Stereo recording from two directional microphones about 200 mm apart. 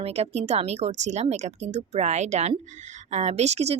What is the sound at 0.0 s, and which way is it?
Speech, 30° right (ahead or behind).